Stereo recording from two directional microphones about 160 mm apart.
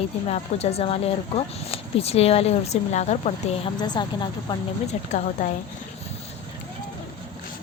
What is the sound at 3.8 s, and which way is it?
Speech, 25° left (ahead or behind).